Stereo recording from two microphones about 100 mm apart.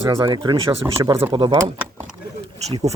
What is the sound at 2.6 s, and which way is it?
Speech, 90° right.